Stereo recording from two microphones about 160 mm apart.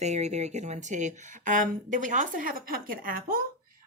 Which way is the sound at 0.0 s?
45° right (ahead or behind).